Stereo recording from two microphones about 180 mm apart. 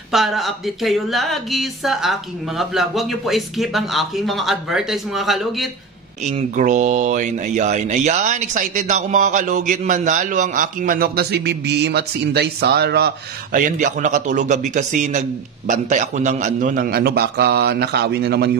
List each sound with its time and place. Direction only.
0.1 s speech: centre (ahead or behind)
6.2 s speech: 40° right (ahead or behind); by 18.5 s 65° right (ahead or behind)